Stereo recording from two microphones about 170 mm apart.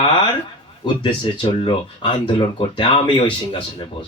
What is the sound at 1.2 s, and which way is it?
Speech, 30° left (ahead or behind).